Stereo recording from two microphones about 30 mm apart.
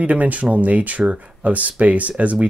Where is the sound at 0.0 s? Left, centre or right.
Right.